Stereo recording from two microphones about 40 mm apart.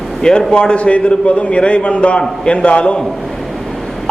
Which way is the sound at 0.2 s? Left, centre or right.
Centre.